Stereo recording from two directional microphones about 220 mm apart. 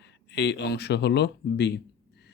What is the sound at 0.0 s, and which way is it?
Speech, 50° left (ahead or behind).